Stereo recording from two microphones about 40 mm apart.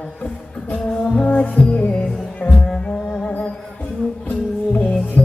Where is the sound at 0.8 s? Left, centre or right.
Left.